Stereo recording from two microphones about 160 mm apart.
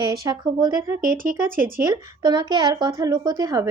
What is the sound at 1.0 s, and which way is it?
Speech, 60° right (ahead or behind).